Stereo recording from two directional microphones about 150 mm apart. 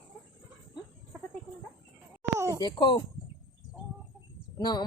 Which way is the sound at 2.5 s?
30° left (ahead or behind).